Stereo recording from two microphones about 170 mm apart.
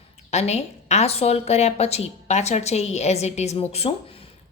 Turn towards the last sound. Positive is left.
turn(degrees=35)  # may be behind; listen again after turning